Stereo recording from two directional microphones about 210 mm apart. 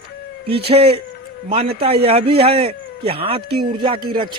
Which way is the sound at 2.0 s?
25° right (ahead or behind).